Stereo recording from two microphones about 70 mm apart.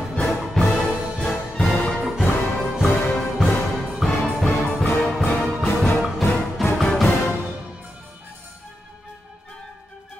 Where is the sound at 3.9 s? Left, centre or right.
Centre.